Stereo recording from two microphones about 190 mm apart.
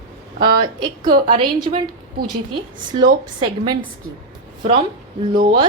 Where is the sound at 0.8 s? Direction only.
25° right (ahead or behind).